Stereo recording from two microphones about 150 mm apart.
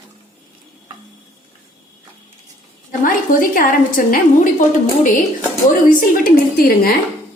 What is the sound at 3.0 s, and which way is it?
A woman's voice, 65° left (ahead or behind).